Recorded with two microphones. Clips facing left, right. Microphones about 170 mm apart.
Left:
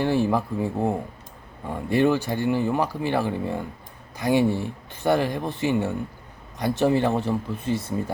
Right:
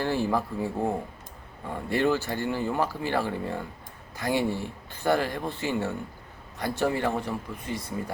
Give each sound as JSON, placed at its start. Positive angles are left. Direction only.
{"t": 0.0, "sound": "speech", "side_deg": 20}